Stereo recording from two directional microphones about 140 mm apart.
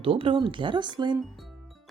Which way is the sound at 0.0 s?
40° right (ahead or behind).